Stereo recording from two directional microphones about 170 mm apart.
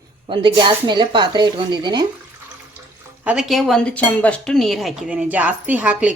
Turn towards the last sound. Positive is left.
turn(degrees=-5)  # may be behind; listen again after turning